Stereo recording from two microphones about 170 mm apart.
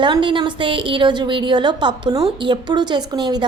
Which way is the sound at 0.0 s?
30° right (ahead or behind).